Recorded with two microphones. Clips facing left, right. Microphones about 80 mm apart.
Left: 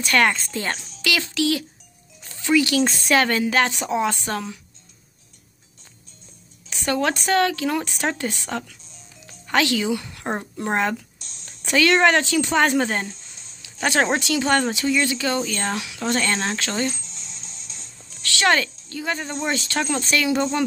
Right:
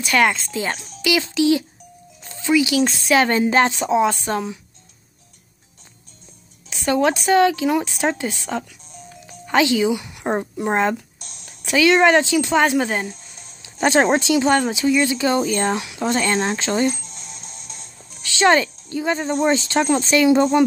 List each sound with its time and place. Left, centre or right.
0.0 s speech: centre
1.0 s a woman's voice: centre
2.8 s speech: centre
3.2 s a woman's voice: right
6.9 s a woman's voice: centre
11.1 s a sound: right
11.4 s speech: centre
13.6 s a sound: right
14.2 s speech: centre
16.9 s music: right
18.1 s a woman's voice: centre